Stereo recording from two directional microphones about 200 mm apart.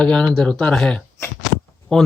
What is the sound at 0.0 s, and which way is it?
Speech, 5° left (ahead or behind).